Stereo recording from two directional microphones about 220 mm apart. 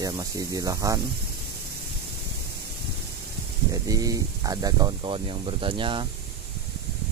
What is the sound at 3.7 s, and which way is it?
Speech, 15° right (ahead or behind).